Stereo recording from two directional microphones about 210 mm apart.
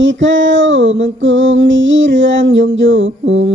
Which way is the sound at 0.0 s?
65° right (ahead or behind).